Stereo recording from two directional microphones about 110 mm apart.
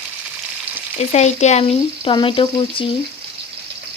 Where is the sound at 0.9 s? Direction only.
90° left.